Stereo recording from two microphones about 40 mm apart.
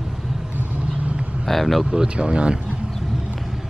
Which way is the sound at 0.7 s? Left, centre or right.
Right.